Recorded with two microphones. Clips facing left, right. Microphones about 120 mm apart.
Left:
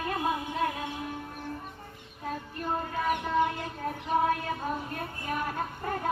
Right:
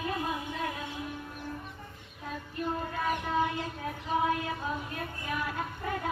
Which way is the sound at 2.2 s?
45° left (ahead or behind).